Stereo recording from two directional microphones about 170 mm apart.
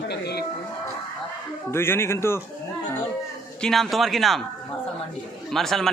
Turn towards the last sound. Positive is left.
turn(degrees=0)  # may be behind; listen again after turning